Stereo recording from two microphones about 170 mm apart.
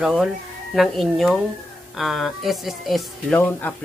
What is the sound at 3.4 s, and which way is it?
Speech, 10° left (ahead or behind).